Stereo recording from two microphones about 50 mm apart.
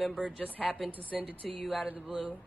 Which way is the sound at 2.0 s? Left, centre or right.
Centre.